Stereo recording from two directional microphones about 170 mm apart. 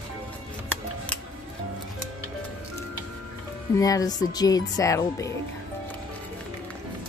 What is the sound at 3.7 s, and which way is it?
Speech, 20° left (ahead or behind).